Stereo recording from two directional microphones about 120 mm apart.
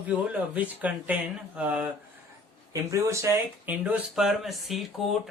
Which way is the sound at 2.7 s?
25° right (ahead or behind).